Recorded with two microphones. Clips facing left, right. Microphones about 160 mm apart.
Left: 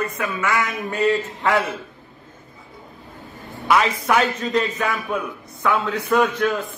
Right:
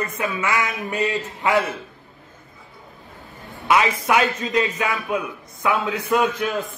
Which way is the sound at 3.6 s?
15° right (ahead or behind).